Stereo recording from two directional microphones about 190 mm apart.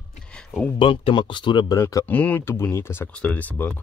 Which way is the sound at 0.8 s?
30° left (ahead or behind).